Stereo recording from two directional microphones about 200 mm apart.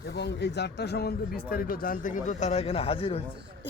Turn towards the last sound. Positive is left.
turn(degrees=30)  # may be behind; listen again after turning